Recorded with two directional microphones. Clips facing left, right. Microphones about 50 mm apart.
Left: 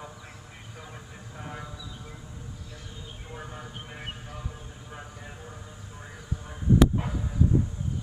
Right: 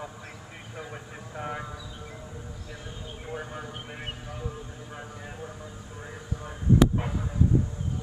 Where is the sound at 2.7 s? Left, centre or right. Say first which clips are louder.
Right 4 dB; right.